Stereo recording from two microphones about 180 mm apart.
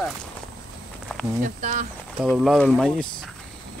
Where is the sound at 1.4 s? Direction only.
45° right (ahead or behind).